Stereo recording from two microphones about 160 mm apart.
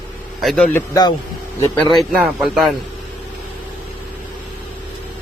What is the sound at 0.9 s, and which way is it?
Speech, 25° left (ahead or behind).